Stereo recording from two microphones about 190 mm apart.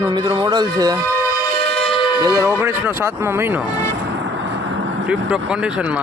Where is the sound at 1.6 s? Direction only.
30° left (ahead or behind).